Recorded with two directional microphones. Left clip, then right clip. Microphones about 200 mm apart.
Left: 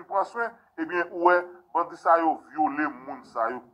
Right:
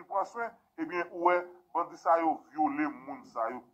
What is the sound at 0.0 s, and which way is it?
Speech, 30° left (ahead or behind).